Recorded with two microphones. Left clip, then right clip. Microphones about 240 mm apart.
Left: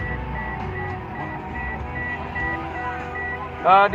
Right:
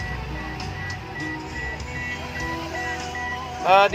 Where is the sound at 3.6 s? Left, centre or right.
Right.